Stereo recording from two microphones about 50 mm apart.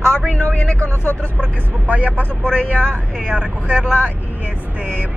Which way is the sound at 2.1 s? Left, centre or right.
Left.